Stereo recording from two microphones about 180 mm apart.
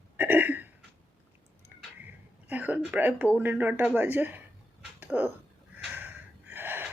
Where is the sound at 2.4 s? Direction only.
10° right (ahead or behind).